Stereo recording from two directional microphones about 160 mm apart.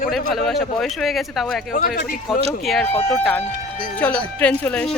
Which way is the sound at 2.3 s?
Centre (ahead or behind).